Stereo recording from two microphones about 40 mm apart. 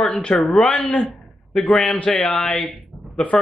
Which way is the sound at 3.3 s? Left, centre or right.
Left.